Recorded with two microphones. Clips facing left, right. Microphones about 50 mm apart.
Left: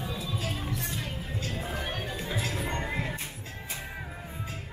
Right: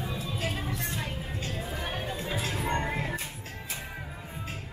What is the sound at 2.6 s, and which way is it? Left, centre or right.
Music, right.